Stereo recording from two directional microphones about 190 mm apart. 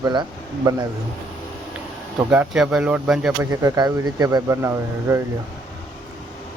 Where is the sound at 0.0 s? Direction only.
20° right (ahead or behind).